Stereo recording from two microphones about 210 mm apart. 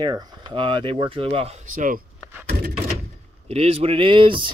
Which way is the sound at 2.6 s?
45° right (ahead or behind).